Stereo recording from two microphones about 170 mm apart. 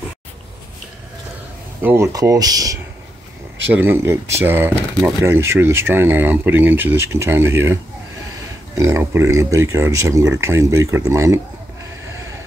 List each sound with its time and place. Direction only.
1.8 s speech: 10° right (ahead or behind)
2.1 s speech: 20° right (ahead or behind)